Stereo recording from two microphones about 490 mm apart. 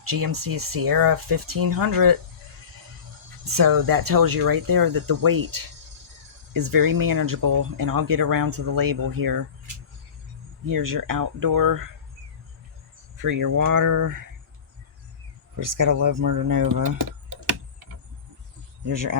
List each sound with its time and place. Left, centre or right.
0.0 s speech: right
3.5 s speech: right
10.7 s speech: right
13.1 s speech: right
15.5 s speech: right
18.9 s speech: right